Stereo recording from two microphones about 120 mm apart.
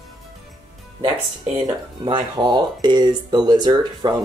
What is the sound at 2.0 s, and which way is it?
Speech, 40° right (ahead or behind).